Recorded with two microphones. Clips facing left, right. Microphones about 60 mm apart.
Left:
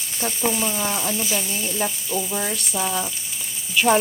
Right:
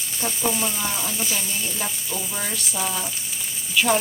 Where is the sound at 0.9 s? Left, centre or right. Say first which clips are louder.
Left 3 dB; centre.